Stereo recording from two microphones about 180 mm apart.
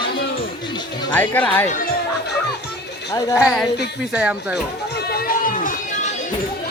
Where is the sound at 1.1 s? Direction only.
10° left (ahead or behind).